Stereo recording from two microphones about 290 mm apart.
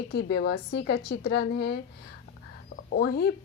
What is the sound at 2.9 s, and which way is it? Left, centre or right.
Speech, left.